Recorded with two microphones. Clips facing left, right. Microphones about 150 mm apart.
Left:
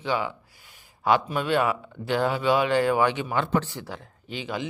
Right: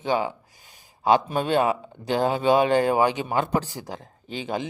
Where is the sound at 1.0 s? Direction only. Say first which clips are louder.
Right 2 dB; 30° right (ahead or behind).